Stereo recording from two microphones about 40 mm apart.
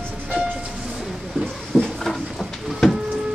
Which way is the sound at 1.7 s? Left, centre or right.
Right.